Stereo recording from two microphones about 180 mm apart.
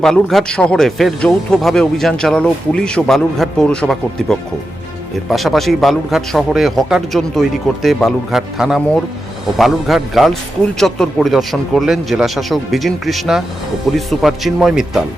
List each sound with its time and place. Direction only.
0.0 s speech: centre (ahead or behind)